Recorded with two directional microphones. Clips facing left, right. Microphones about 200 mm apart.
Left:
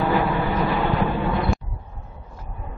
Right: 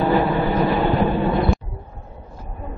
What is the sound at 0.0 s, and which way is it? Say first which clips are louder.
Vehicle: right 3 dB; 30° right (ahead or behind).